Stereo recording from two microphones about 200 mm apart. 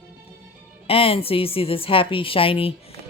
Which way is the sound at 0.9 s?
30° left (ahead or behind).